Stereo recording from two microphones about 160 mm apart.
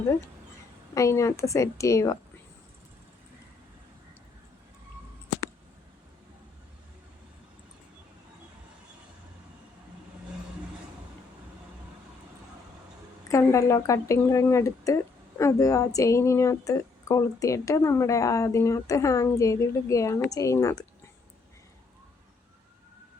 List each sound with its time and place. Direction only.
0.9 s speech: 20° left (ahead or behind)
13.2 s speech: 20° left (ahead or behind)